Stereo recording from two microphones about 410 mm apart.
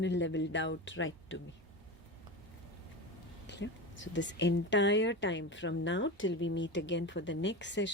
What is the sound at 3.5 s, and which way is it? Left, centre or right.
Speech, left.